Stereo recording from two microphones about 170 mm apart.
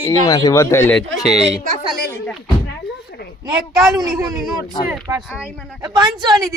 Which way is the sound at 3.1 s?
90° left.